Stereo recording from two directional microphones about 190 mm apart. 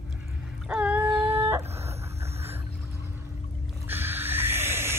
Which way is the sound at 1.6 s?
35° right (ahead or behind).